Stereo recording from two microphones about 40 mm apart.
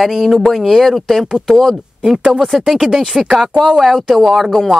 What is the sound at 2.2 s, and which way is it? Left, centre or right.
Speech, centre.